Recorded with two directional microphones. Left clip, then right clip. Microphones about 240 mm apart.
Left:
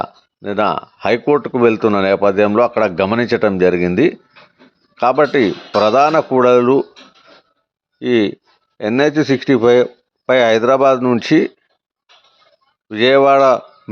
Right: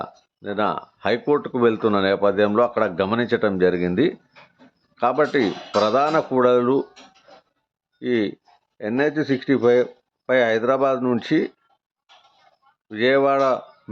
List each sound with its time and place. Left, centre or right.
0.0 s speech: centre
7.9 s speech: centre
12.9 s speech: left